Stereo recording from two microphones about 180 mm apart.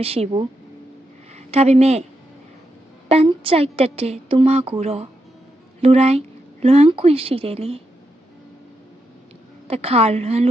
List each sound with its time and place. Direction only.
0.0 s speech: 35° right (ahead or behind)
3.1 s speech: 30° right (ahead or behind)
9.6 s speech: 35° right (ahead or behind)